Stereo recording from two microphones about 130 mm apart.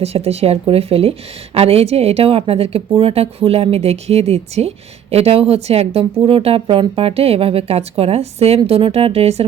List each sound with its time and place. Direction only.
0.0 s speech: 50° right (ahead or behind)